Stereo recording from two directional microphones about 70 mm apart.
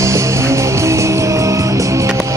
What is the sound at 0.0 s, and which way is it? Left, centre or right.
Music, right.